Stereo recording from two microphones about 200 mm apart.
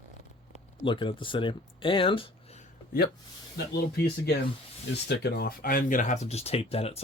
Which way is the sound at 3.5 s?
55° left (ahead or behind).